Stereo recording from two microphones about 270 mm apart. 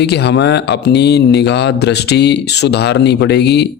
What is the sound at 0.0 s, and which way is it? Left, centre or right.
Speech, left.